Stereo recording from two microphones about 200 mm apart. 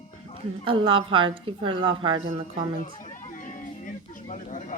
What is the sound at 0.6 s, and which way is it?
A woman's voice, 25° right (ahead or behind).